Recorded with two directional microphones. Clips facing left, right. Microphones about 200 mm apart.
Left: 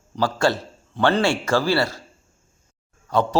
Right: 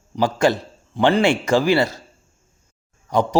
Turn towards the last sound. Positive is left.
turn(degrees=-15)  # may be behind; listen again after turning